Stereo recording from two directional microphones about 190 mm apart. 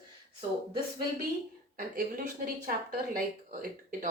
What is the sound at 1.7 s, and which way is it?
Speech, 50° right (ahead or behind).